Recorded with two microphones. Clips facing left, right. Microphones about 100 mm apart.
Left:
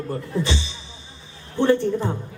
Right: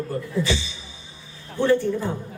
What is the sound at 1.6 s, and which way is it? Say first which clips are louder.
Speech: left 1 dB; 20° left (ahead or behind).